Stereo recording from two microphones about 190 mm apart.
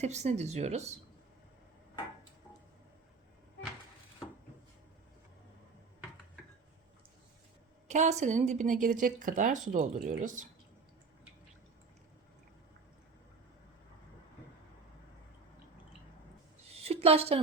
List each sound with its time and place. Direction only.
0.0 s a woman's voice: 35° right (ahead or behind)
7.9 s a woman's voice: 40° right (ahead or behind)
16.6 s a sound: 30° right (ahead or behind)